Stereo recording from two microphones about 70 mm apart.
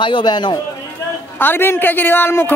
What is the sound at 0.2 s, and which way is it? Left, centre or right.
Speech, left.